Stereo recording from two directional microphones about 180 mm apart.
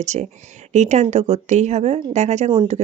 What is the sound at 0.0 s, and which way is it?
Speech, 40° right (ahead or behind).